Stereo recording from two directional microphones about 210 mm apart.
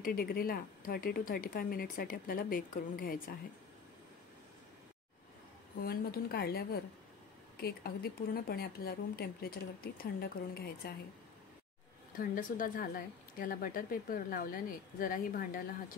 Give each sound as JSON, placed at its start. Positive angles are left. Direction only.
{"t": 0.0, "sound": "a woman's voice", "side_deg": 45}
{"t": 5.8, "sound": "a woman's voice", "side_deg": 45}
{"t": 12.1, "sound": "a woman's voice", "side_deg": 40}